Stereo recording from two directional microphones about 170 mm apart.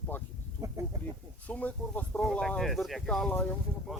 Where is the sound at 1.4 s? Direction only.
10° left (ahead or behind).